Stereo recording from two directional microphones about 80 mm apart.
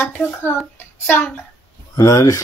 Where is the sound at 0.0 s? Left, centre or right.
Left.